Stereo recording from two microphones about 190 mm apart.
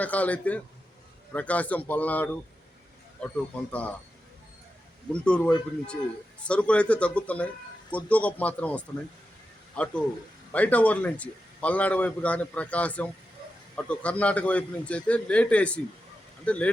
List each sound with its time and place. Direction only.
0.0 s a man's voice: 10° left (ahead or behind)
5.1 s a man's voice: 5° left (ahead or behind)